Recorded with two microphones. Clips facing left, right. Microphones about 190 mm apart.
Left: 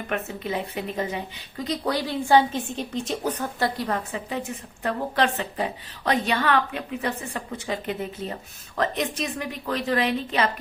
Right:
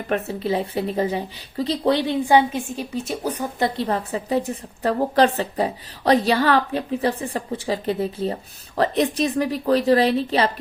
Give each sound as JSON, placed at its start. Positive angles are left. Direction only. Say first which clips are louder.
{"t": 0.1, "sound": "speech", "louder": "right 6 dB", "side_deg": -35}
{"t": 3.8, "sound": "a woman's voice", "louder": "right 4 dB", "side_deg": -30}